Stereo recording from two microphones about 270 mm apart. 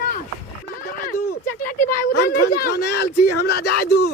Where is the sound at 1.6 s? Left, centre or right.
Left.